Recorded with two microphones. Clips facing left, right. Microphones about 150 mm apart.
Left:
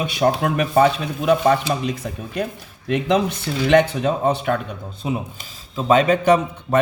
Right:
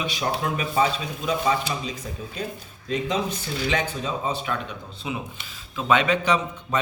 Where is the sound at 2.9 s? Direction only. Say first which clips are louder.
Left 7 dB; 70° left (ahead or behind).